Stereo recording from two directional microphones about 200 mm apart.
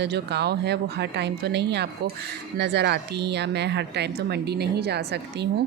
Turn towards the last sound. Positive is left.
turn(degrees=-55)  # may be behind; listen again after turning